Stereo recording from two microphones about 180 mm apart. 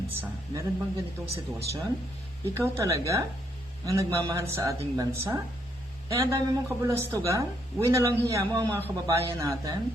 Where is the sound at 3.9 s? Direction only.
15° right (ahead or behind).